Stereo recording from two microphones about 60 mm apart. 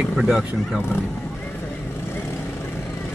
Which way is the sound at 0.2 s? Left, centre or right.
Centre.